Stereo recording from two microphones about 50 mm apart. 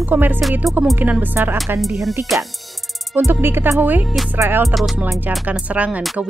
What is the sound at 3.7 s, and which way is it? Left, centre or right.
Speech, right.